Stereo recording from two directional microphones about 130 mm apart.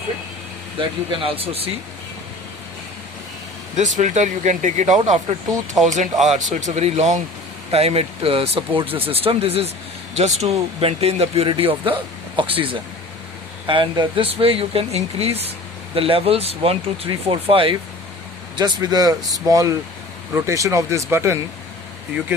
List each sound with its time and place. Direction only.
0.8 s speech: 45° right (ahead or behind)
3.8 s speech: 70° right (ahead or behind); by 17.7 s 45° right (ahead or behind)
18.5 s speech: 30° right (ahead or behind)